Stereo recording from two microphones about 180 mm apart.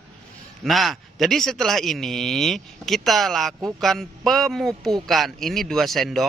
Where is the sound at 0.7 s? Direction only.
Centre (ahead or behind).